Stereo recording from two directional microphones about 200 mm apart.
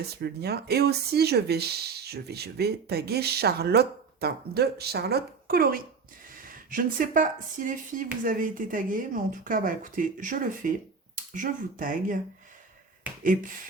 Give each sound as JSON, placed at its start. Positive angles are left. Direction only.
{"t": 0.2, "sound": "speech", "side_deg": -55}
{"t": 13.2, "sound": "speech", "side_deg": -45}